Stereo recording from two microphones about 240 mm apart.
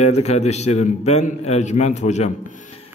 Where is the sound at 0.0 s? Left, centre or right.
Left.